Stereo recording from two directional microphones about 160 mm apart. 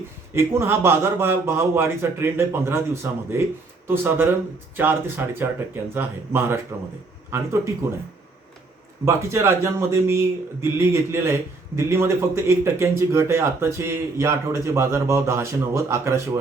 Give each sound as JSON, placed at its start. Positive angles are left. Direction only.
{"t": 0.3, "sound": "speech", "side_deg": -15}
{"t": 9.0, "sound": "speech", "side_deg": -15}